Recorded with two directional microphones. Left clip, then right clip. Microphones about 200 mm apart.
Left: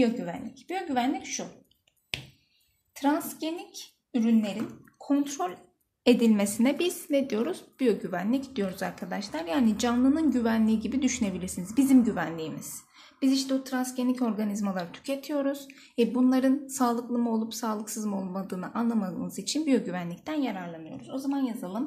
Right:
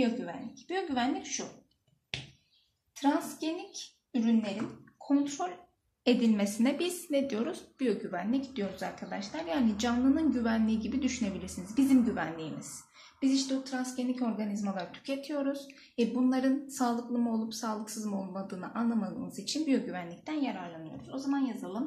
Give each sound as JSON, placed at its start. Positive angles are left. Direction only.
{"t": 0.7, "sound": "a woman's voice", "side_deg": 50}
{"t": 3.0, "sound": "a woman's voice", "side_deg": 50}
{"t": 6.0, "sound": "a woman's voice", "side_deg": 35}